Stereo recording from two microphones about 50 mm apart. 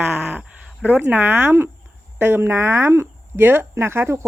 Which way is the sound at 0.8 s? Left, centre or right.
Right.